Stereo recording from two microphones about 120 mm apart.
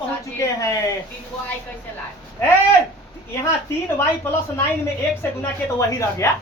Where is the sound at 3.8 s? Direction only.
20° left (ahead or behind).